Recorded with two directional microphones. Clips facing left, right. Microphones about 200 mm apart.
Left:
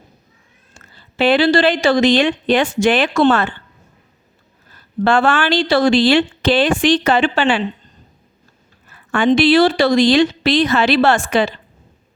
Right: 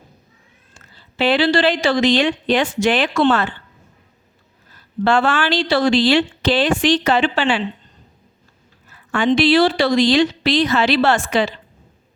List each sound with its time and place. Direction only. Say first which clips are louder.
0.7 s a woman's voice: left 3 dB; 50° left (ahead or behind)
5.0 s a woman's voice: left 2 dB; 50° left (ahead or behind)
8.9 s a woman's voice: left 3 dB; 55° left (ahead or behind)